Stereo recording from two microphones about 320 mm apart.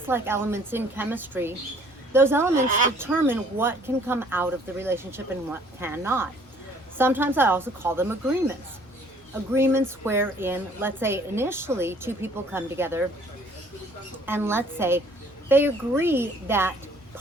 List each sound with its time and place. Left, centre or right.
0.1 s speech: centre
9.6 s speech: centre
14.3 s speech: centre